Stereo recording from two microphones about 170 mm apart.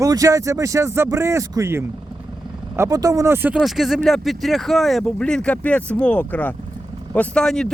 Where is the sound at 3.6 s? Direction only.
Centre (ahead or behind).